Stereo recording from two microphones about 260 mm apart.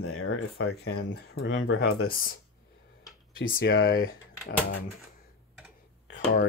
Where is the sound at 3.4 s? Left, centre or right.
Left.